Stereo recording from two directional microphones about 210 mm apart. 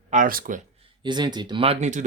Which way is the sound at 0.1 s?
40° right (ahead or behind).